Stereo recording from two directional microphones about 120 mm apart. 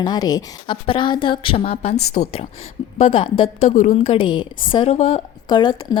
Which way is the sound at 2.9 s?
50° left (ahead or behind).